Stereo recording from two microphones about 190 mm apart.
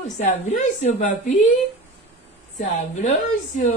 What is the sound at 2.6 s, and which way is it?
A woman's voice, 40° left (ahead or behind).